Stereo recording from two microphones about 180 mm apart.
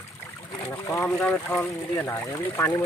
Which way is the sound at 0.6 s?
15° left (ahead or behind).